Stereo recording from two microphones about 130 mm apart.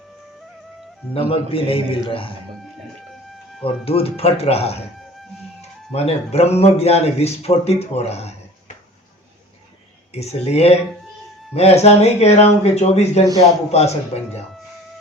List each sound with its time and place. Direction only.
1.1 s a man's voice: 45° left (ahead or behind)
3.6 s a man's voice: 50° left (ahead or behind)
5.9 s a man's voice: 55° left (ahead or behind)
10.1 s a man's voice: 55° left (ahead or behind)